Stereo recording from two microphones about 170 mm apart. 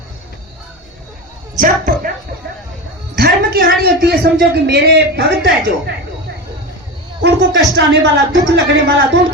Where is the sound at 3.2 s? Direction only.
65° right (ahead or behind); by 5.9 s 80° right.